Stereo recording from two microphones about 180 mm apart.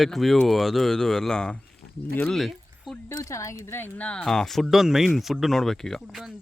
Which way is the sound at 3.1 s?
15° left (ahead or behind).